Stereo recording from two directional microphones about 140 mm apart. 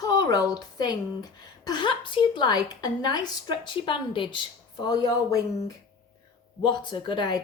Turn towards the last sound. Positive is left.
turn(degrees=35)  # may be behind; listen again after turning